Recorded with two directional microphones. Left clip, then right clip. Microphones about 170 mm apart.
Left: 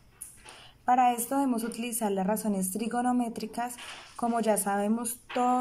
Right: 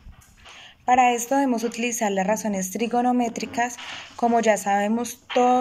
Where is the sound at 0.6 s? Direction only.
20° left (ahead or behind).